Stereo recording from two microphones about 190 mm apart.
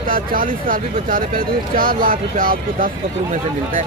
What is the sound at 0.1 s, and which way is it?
Speech, 45° right (ahead or behind).